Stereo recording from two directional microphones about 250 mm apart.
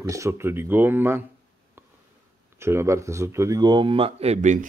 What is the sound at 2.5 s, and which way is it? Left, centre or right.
Speech, centre.